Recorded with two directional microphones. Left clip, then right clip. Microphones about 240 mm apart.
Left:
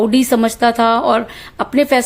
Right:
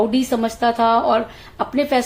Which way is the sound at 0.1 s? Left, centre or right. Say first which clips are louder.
Left 6 dB; left.